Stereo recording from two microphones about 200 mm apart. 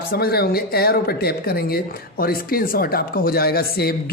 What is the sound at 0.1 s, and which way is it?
Speech, 50° left (ahead or behind).